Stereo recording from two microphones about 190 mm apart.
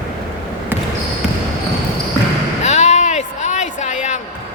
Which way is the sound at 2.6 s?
35° left (ahead or behind).